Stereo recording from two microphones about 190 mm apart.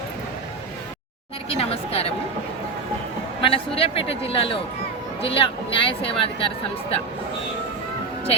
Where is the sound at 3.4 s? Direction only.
30° left (ahead or behind).